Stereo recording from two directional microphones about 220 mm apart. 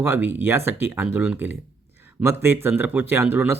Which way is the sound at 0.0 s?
10° right (ahead or behind).